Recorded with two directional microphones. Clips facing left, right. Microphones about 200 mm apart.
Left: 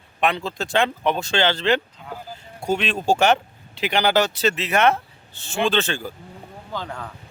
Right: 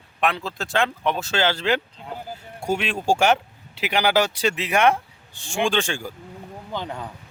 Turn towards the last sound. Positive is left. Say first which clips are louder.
# right 1 dB
turn(degrees=-15)  # may be behind; listen again after turning